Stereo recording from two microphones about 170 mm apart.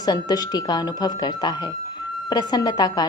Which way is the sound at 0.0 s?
25° left (ahead or behind).